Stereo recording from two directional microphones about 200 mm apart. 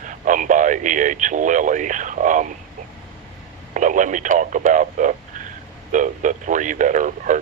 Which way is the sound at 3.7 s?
40° right (ahead or behind).